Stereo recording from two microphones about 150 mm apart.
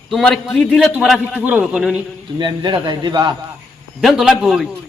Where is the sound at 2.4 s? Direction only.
30° right (ahead or behind).